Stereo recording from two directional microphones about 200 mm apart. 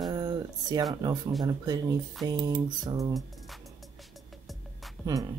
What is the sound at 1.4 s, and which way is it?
Speech, 20° right (ahead or behind).